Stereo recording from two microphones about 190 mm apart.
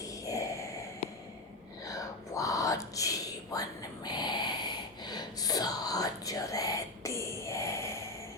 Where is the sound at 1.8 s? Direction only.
20° left (ahead or behind).